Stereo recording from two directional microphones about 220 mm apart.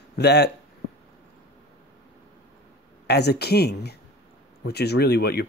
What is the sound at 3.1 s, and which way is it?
Speech, 50° left (ahead or behind).